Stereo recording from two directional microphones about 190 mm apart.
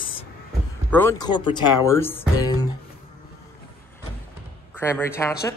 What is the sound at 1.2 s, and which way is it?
Speech, 25° left (ahead or behind).